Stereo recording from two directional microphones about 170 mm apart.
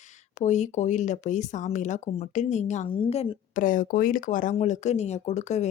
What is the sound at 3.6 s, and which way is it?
Speech, 50° left (ahead or behind).